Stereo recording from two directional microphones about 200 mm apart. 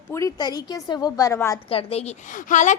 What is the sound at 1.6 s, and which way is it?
Speech, 30° left (ahead or behind).